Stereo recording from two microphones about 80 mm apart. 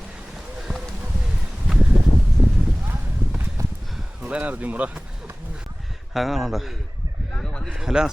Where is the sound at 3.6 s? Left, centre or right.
Right.